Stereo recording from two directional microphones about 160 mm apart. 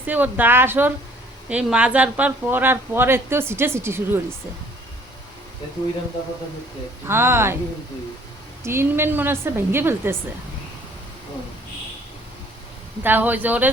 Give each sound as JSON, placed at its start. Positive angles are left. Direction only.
{"t": 0.0, "sound": "speech", "side_deg": -10}
{"t": 7.1, "sound": "speech", "side_deg": -15}
{"t": 8.6, "sound": "speech", "side_deg": -15}
{"t": 13.0, "sound": "speech", "side_deg": -10}